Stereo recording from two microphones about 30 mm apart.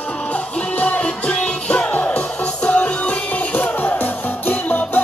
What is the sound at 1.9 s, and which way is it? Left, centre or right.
Music, left.